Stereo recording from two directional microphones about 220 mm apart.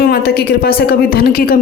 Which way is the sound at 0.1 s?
45° left (ahead or behind).